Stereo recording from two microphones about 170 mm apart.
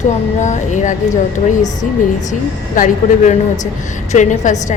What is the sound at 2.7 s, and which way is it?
A woman's voice, 50° left (ahead or behind).